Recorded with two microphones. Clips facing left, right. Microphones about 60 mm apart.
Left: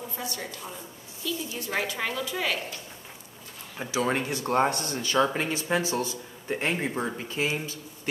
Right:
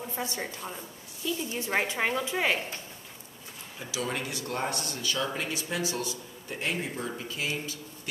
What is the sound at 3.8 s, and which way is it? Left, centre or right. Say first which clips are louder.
Speech: left 6 dB; left.